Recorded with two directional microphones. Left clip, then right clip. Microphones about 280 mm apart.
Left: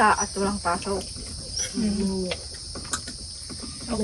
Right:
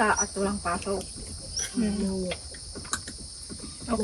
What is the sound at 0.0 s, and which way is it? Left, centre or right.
Cricket, centre.